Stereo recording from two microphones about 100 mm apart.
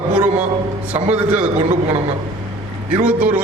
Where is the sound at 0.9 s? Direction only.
15° right (ahead or behind).